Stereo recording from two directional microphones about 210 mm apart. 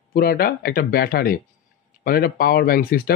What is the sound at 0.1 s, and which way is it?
Speech, 45° left (ahead or behind).